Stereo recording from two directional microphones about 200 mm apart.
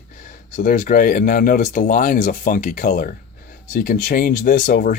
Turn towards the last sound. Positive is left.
turn(degrees=40)  # may be behind; listen again after turning